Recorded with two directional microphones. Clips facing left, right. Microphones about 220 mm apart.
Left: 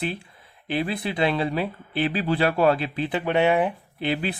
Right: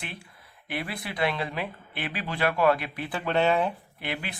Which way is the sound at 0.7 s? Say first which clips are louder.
Left 8 dB; 25° left (ahead or behind).